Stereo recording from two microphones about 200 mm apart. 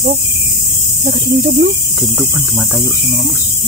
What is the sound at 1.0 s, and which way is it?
Speech, 45° right (ahead or behind).